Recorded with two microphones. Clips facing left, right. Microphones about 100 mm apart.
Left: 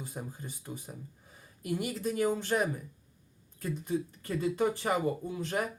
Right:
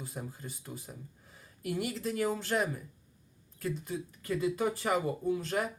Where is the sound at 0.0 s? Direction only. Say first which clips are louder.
Left 1 dB; 20° left (ahead or behind).